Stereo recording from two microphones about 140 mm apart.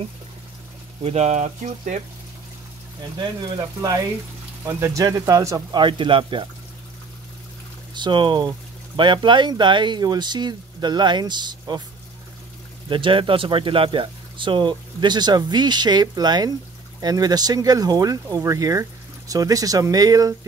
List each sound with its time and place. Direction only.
1.0 s speech: 55° right (ahead or behind)
3.2 s speech: 30° right (ahead or behind)
5.8 s speech: 35° right (ahead or behind)
7.9 s speech: 35° right (ahead or behind)
12.9 s speech: 35° right (ahead or behind)